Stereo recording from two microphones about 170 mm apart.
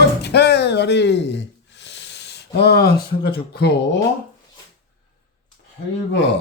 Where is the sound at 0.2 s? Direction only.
80° left.